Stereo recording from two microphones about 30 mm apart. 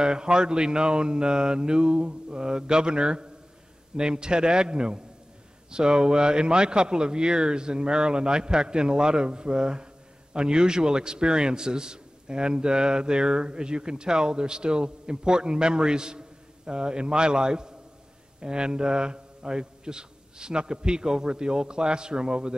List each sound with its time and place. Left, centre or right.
0.0 s a man's voice: right
2.0 s mantra: right
3.9 s a man's voice: right